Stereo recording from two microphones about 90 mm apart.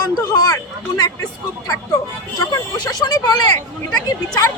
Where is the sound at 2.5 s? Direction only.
45° left (ahead or behind).